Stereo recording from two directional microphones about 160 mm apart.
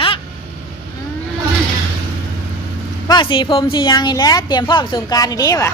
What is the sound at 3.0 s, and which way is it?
A woman's voice, 30° left (ahead or behind).